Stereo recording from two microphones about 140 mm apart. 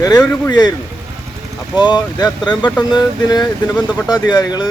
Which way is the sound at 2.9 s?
30° left (ahead or behind).